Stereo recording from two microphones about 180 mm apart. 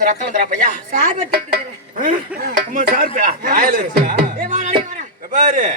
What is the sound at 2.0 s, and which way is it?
A man's voice, 45° right (ahead or behind).